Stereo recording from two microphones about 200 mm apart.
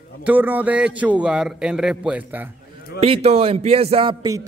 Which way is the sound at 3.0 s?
30° right (ahead or behind).